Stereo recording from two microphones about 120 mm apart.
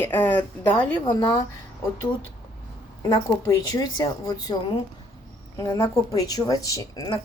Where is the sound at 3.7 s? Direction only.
30° left (ahead or behind).